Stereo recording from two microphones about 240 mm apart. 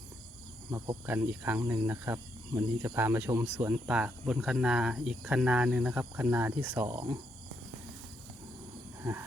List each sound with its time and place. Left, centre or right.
0.7 s speech: centre